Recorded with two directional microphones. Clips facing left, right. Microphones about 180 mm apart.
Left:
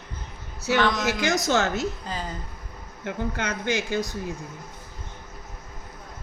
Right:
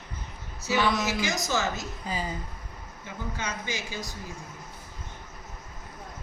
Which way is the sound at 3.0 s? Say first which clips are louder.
Left 7 dB; 65° left (ahead or behind).